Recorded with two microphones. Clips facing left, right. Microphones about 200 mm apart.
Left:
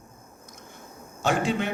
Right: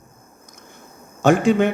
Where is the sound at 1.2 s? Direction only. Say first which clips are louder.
Right 10 dB; 50° right (ahead or behind).